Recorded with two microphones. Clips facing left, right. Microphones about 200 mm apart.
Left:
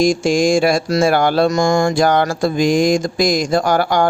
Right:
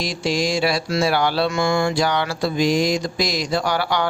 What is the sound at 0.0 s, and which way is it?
Mantra, 45° left (ahead or behind).